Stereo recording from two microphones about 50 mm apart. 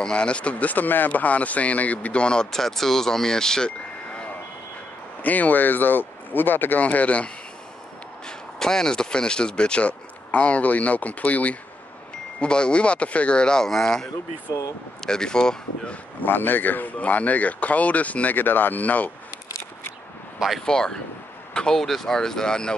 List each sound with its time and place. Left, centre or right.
0.0 s speech: left
2.2 s speech: centre
5.2 s speech: left
6.8 s speech: left
8.3 s speech: centre; by 11.5 s left
12.4 s speech: centre
15.0 s speech: centre
16.2 s speech: left
20.6 s speech: centre